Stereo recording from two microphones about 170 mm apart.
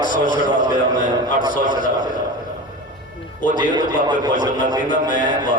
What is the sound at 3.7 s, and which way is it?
Speech, 25° right (ahead or behind).